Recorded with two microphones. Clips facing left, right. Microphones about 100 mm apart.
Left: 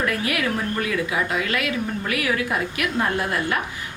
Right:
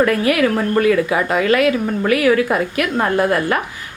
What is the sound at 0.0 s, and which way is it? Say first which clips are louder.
A woman's voice: right 9 dB; 60° right (ahead or behind).